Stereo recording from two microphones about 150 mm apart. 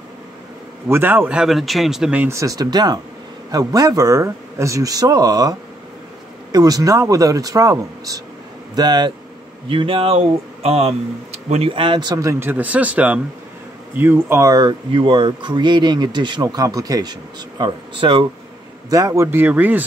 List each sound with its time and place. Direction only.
0.8 s speech: 15° right (ahead or behind); by 18.2 s 35° right (ahead or behind)
18.9 s speech: 20° right (ahead or behind)